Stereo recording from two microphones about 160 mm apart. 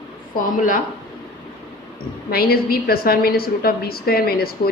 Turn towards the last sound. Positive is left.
turn(degrees=70)  # may be behind; listen again after turning